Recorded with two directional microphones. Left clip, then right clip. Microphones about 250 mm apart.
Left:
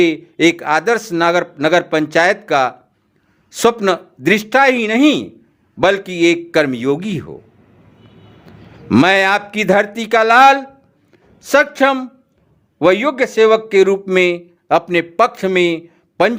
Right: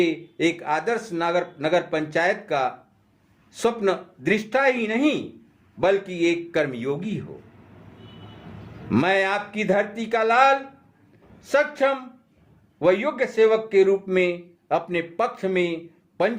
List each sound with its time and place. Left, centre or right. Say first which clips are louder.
0.0 s speech: left 9 dB; left
8.9 s speech: left 9 dB; left